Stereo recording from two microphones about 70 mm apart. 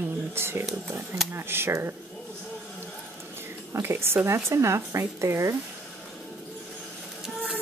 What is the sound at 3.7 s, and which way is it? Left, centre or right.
Speech, right.